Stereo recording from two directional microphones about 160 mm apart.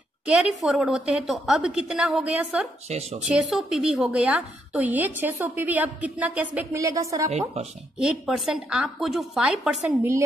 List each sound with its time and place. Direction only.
0.4 s a woman's voice: centre (ahead or behind)
2.9 s speech: 45° right (ahead or behind)
3.3 s a woman's voice: centre (ahead or behind); by 7.2 s 20° right (ahead or behind)
7.2 s speech: 45° right (ahead or behind)
8.0 s a woman's voice: 5° right (ahead or behind)